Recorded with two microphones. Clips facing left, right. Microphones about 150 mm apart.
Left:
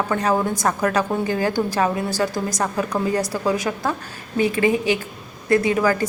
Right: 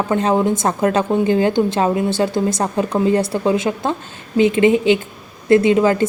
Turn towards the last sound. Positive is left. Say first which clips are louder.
# right 5 dB
turn(degrees=-25)  # may be behind; listen again after turning